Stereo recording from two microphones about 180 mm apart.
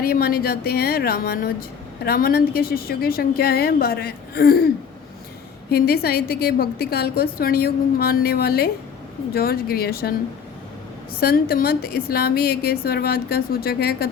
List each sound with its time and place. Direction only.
0.0 s a woman's voice: 55° left (ahead or behind)
5.7 s a woman's voice: 60° left (ahead or behind)
11.2 s a woman's voice: 55° left (ahead or behind)